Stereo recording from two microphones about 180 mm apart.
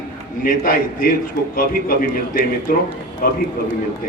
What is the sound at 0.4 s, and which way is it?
Speech, 50° left (ahead or behind).